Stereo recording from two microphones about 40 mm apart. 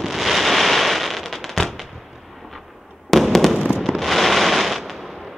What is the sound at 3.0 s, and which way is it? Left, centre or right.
Fireworks, centre.